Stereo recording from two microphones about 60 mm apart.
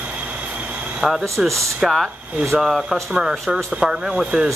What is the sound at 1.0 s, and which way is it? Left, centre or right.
Speech, centre.